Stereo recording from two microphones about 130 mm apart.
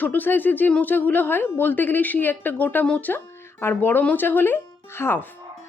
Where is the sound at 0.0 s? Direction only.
15° left (ahead or behind).